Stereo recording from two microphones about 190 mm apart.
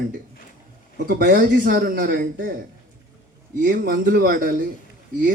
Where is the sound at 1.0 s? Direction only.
50° right (ahead or behind).